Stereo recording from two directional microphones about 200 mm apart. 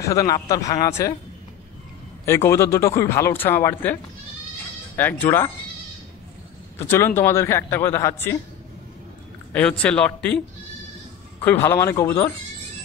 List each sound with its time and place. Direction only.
0.0 s speech: 15° left (ahead or behind)
2.2 s speech: 10° left (ahead or behind)
6.8 s speech: 15° left (ahead or behind)
9.5 s speech: 5° left (ahead or behind)
11.4 s speech: 10° left (ahead or behind)